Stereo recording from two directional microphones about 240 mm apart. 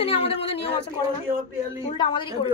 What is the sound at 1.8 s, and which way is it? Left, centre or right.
Speech, centre.